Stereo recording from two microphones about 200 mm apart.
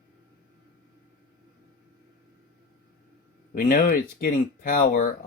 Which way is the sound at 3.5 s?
45° left (ahead or behind).